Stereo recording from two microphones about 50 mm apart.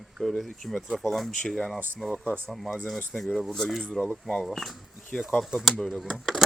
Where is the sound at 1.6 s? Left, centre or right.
Centre.